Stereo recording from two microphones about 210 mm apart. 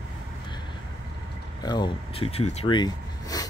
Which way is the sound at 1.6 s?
20° left (ahead or behind).